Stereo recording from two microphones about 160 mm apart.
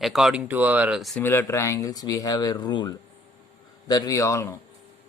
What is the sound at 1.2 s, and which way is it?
Speech, 15° left (ahead or behind).